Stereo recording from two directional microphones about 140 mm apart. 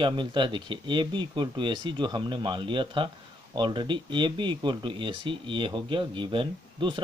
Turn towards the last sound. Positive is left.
turn(degrees=-35)  # may be behind; listen again after turning